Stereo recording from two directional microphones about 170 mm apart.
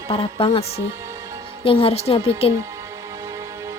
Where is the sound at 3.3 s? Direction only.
15° right (ahead or behind).